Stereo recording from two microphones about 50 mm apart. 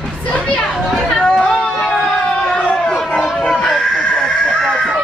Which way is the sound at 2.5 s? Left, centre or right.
Centre.